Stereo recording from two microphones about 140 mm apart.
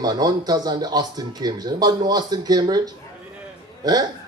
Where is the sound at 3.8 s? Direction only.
30° right (ahead or behind).